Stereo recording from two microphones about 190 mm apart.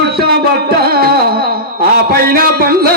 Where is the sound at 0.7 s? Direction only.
55° right (ahead or behind).